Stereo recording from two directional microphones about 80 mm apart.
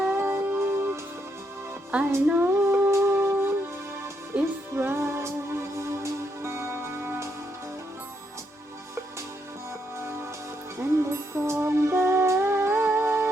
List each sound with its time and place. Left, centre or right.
0.0 s music: right
1.9 s speech: centre
2.4 s music: right
2.9 s wind instrument: right
4.3 s music: centre
4.8 s music: right
10.8 s music: right